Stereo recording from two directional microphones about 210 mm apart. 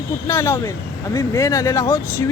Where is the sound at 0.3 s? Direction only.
15° left (ahead or behind).